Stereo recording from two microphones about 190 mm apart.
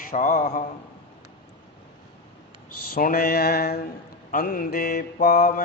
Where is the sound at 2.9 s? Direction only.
50° left (ahead or behind).